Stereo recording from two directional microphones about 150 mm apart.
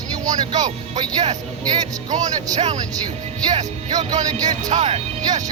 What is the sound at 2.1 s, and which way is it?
Speech, 55° right (ahead or behind).